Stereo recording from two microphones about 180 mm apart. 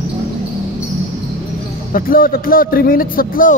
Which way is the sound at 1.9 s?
50° left (ahead or behind).